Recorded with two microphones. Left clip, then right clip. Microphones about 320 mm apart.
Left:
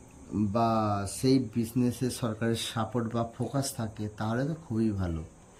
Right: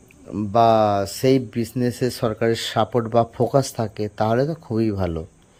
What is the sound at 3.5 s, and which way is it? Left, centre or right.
Speech, centre.